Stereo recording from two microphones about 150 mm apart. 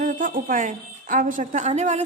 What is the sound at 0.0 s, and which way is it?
A woman's voice, 65° right (ahead or behind).